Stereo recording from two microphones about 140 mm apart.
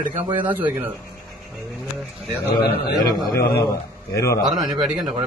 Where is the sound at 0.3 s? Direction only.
10° right (ahead or behind).